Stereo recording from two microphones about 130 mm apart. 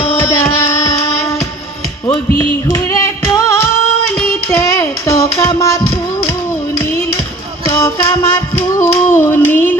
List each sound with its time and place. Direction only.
0.1 s music: 20° left (ahead or behind)
2.6 s female singing: 25° left (ahead or behind)
4.5 s child singing: 20° left (ahead or behind)
5.5 s music: 25° left (ahead or behind)
7.8 s a sound: 20° left (ahead or behind)